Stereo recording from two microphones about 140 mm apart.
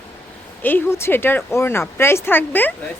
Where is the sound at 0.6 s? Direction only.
15° left (ahead or behind).